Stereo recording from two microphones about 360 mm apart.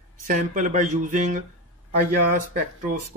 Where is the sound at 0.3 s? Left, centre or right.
Right.